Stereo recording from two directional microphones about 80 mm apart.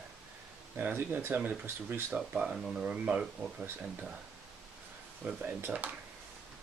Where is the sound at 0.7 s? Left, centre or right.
Right.